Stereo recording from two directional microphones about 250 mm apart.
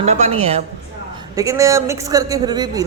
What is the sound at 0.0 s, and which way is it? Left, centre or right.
Speech, right.